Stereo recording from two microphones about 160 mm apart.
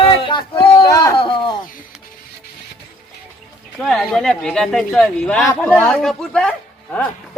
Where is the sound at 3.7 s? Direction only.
Centre (ahead or behind).